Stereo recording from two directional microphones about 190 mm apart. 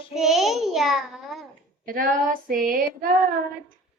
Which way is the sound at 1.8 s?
45° right (ahead or behind).